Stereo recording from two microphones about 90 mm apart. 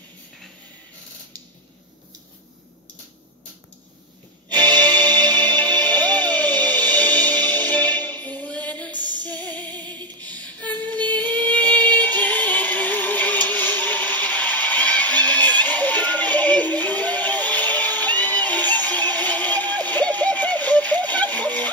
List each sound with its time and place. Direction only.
4.7 s music: 20° left (ahead or behind)
10.2 s a sound: 15° left (ahead or behind)
11.1 s music: 20° left (ahead or behind)